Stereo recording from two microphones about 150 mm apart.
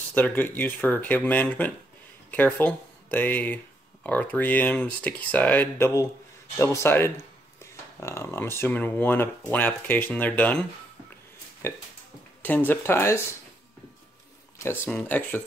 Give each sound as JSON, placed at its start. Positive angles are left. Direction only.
{"t": 0.1, "sound": "speech", "side_deg": 10}
{"t": 11.6, "sound": "speech", "side_deg": 15}
{"t": 14.6, "sound": "speech", "side_deg": 15}